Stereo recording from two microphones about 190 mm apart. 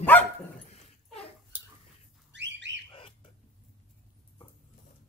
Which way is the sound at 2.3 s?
70° right (ahead or behind).